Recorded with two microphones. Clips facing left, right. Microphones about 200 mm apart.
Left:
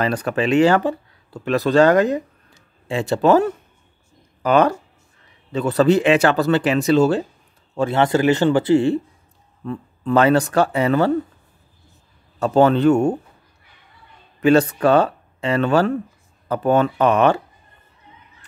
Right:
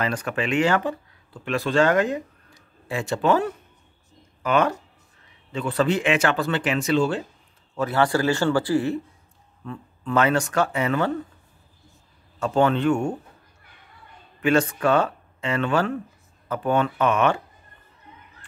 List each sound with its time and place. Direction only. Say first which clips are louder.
0.0 s speech: left 6 dB; 35° left (ahead or behind)
7.7 s a man's voice: left 4 dB; 25° left (ahead or behind)
12.4 s speech: left 6 dB; 35° left (ahead or behind)
14.4 s speech: left 6 dB; 35° left (ahead or behind)